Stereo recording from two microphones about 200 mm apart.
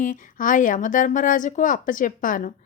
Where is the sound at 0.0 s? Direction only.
40° left (ahead or behind).